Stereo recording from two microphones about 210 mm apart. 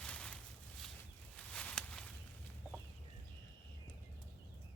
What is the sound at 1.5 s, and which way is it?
Walk, 5° left (ahead or behind).